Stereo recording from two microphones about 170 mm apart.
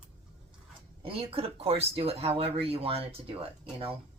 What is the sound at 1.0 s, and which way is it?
Speech, 35° right (ahead or behind).